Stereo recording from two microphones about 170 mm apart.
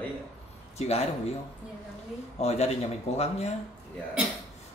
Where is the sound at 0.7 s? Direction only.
40° left (ahead or behind).